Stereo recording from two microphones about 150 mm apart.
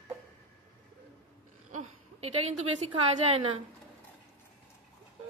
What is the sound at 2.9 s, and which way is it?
Speech, 40° right (ahead or behind).